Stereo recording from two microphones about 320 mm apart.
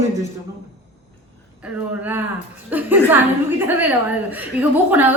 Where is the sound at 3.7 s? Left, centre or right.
Centre.